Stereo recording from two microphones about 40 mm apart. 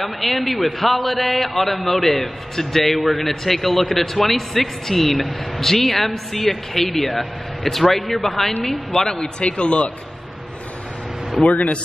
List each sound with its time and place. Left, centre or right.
0.0 s a man's voice: centre
9.2 s a man's voice: left
11.4 s a man's voice: left